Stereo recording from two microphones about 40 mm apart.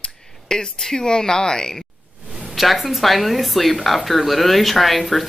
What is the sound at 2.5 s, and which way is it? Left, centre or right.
Speech, centre.